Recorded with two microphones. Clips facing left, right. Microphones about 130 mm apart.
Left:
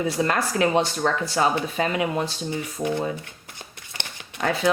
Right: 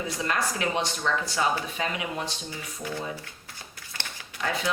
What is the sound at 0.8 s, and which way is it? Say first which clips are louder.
Speech: left 5 dB; 60° left (ahead or behind).